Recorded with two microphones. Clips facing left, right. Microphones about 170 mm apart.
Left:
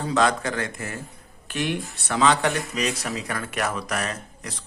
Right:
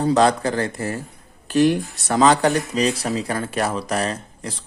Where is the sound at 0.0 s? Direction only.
35° right (ahead or behind).